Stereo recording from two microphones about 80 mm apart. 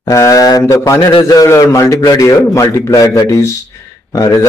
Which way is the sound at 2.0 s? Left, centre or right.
Left.